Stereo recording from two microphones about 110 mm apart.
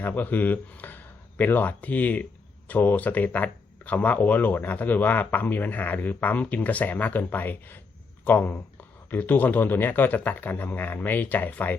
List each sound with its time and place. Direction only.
0.0 s speech: 15° left (ahead or behind)